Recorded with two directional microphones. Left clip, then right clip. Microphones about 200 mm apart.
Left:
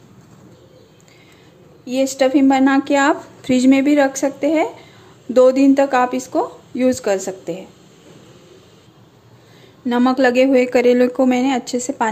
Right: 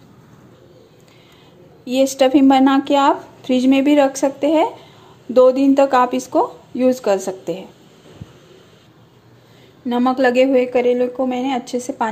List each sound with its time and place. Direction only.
1.9 s a woman's voice: 10° right (ahead or behind)
9.8 s a woman's voice: 10° left (ahead or behind)